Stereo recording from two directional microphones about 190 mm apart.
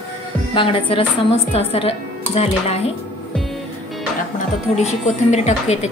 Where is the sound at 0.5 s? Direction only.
30° left (ahead or behind).